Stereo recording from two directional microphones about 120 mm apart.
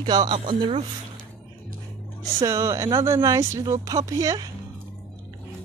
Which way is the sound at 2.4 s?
25° right (ahead or behind).